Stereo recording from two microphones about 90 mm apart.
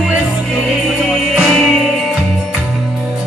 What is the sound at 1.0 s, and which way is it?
Music, centre (ahead or behind).